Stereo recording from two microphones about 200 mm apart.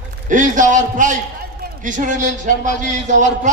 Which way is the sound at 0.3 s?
40° right (ahead or behind).